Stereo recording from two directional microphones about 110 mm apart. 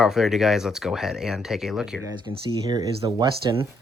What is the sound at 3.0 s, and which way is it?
Speech, 50° right (ahead or behind).